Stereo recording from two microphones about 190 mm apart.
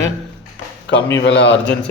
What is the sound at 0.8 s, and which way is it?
Speech, 70° left (ahead or behind).